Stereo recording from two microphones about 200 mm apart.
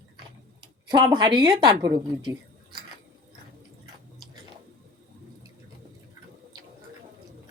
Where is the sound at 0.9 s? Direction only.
20° right (ahead or behind).